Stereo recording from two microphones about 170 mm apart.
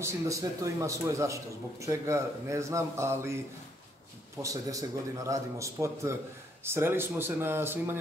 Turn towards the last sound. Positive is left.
turn(degrees=-15)  # may be behind; listen again after turning